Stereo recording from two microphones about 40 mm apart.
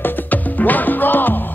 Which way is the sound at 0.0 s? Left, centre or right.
Left.